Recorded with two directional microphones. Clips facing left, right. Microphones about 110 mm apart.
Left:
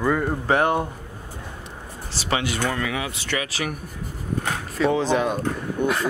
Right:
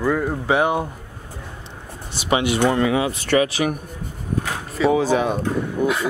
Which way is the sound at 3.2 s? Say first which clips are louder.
Right 10 dB; 45° right (ahead or behind).